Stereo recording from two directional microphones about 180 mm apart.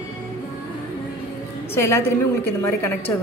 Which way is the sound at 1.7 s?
15° left (ahead or behind).